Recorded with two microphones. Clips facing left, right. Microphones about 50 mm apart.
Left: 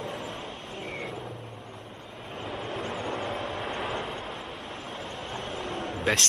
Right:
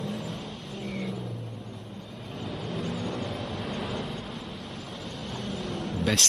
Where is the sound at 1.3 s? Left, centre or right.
Left.